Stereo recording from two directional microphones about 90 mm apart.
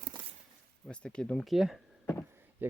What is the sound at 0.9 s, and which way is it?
Speech, 10° left (ahead or behind).